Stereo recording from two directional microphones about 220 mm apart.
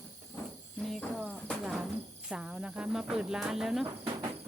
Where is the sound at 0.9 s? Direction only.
Centre (ahead or behind).